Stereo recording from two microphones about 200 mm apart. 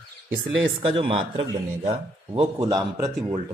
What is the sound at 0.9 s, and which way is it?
A man's voice, 25° right (ahead or behind).